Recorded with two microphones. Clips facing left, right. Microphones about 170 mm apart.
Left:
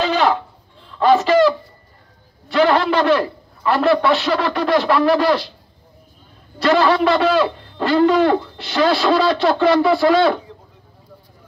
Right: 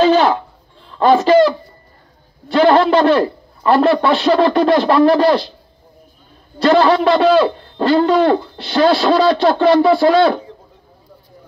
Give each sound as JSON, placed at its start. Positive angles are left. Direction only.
{"t": 0.0, "sound": "a sound", "side_deg": -35}
{"t": 0.9, "sound": "a man's voice", "side_deg": -35}
{"t": 2.4, "sound": "a man's voice", "side_deg": -35}
{"t": 6.6, "sound": "a man's voice", "side_deg": -35}